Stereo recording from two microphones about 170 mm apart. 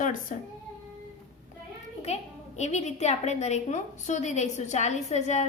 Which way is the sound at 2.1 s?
40° left (ahead or behind).